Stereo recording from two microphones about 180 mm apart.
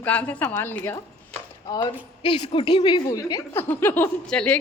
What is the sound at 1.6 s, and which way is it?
A woman's voice, 25° left (ahead or behind).